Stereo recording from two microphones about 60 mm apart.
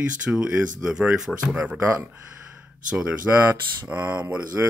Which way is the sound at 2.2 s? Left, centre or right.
Centre.